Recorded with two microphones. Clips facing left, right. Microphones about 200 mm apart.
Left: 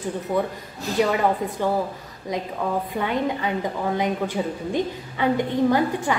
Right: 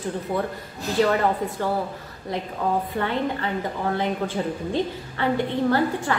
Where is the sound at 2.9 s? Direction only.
15° left (ahead or behind).